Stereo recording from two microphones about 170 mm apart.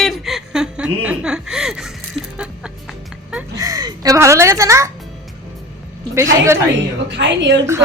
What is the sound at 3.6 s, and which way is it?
A woman's voice, 20° right (ahead or behind).